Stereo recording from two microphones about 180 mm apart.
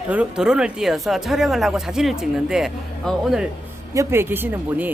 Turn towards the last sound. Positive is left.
turn(degrees=-10)  # may be behind; listen again after turning